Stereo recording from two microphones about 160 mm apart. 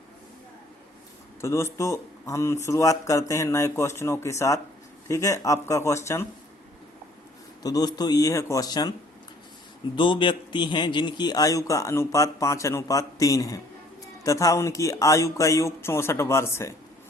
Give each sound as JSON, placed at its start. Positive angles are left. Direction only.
{"t": 1.4, "sound": "speech", "side_deg": 15}
{"t": 7.6, "sound": "speech", "side_deg": 25}
{"t": 9.9, "sound": "speech", "side_deg": 30}